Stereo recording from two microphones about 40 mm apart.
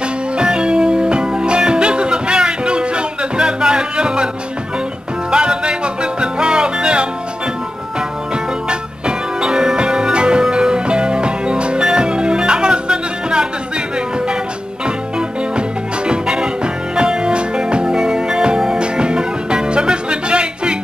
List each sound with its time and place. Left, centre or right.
0.4 s music: right
5.3 s music: right
8.6 s music: right
16.1 s music: right